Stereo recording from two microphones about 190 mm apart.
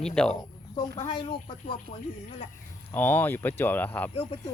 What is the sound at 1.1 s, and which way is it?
Speech, 25° left (ahead or behind).